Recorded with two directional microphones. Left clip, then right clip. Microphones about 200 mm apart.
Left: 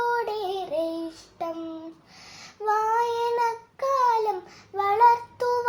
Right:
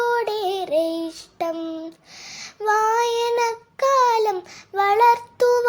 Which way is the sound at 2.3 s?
30° right (ahead or behind).